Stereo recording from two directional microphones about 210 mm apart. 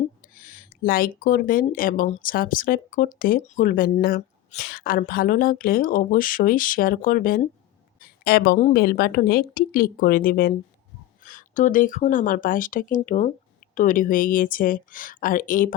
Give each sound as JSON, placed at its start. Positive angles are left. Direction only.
{"t": 0.3, "sound": "a woman's voice", "side_deg": 40}